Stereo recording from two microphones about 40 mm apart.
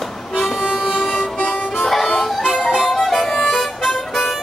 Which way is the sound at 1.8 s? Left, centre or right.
Centre.